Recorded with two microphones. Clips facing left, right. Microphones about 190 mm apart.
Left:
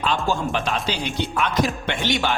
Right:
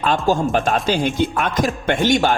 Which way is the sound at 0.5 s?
45° right (ahead or behind).